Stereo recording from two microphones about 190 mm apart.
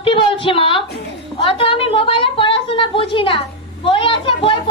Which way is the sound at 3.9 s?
25° left (ahead or behind).